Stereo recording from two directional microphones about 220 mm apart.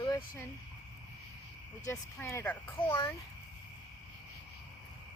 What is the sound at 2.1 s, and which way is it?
Speech, 10° left (ahead or behind).